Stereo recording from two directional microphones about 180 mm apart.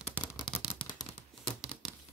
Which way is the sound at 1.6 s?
Centre (ahead or behind).